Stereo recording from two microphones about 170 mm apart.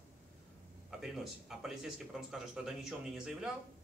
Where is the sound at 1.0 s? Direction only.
Centre (ahead or behind).